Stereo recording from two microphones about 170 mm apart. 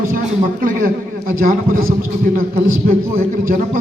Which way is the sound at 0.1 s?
55° right (ahead or behind).